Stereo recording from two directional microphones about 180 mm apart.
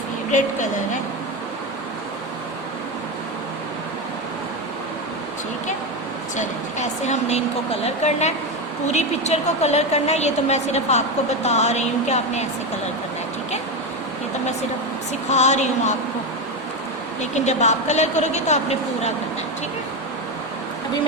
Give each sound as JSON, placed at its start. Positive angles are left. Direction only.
{"t": 0.3, "sound": "speech", "side_deg": 45}
{"t": 6.3, "sound": "a woman's voice", "side_deg": 40}
{"t": 15.3, "sound": "a woman's voice", "side_deg": 40}
{"t": 17.2, "sound": "a woman's voice", "side_deg": 40}